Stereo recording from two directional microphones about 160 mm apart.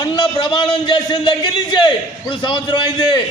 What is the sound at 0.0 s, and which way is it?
A man's voice, 30° left (ahead or behind).